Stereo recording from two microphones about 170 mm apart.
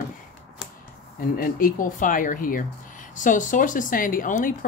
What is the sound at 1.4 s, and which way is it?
Speech, 55° left (ahead or behind).